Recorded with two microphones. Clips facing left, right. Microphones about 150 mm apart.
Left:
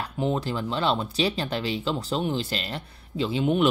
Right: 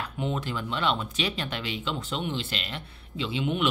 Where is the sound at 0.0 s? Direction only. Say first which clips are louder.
Left 4 dB; 35° left (ahead or behind).